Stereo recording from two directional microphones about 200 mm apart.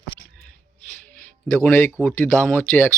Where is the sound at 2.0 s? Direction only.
10° left (ahead or behind).